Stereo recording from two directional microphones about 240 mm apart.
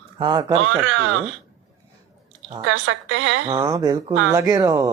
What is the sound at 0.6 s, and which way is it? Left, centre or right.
Speech, right.